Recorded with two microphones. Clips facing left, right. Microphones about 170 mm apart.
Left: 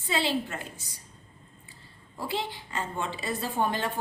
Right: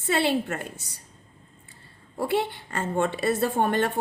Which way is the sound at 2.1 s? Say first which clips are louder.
Right 7 dB; 60° right (ahead or behind).